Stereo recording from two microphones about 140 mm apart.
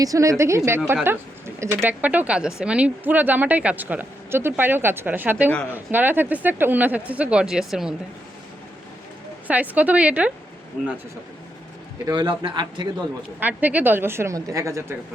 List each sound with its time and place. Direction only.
0.0 s speech: 25° right (ahead or behind); by 7.9 s 5° right (ahead or behind)
9.5 s speech: 10° right (ahead or behind)
12.0 s a man's voice: 30° right (ahead or behind)
13.4 s speech: 10° right (ahead or behind)